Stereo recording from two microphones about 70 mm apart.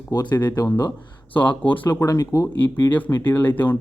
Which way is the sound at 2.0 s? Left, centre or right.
Left.